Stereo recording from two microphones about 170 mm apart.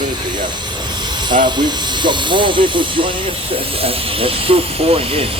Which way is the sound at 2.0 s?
30° right (ahead or behind).